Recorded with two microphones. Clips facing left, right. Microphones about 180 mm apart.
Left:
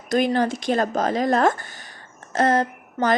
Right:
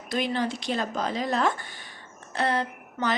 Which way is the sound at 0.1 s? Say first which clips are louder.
Left 7 dB; 45° left (ahead or behind).